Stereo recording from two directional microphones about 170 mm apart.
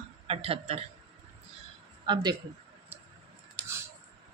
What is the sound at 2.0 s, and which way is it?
Speech, 25° right (ahead or behind).